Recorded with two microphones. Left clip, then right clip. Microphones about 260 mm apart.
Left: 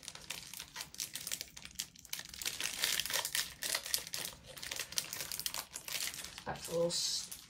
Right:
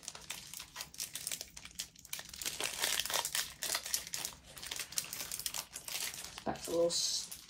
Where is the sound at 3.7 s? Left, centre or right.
Centre.